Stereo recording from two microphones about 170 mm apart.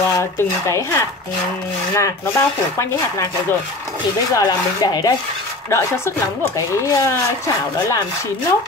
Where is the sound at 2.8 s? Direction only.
15° left (ahead or behind).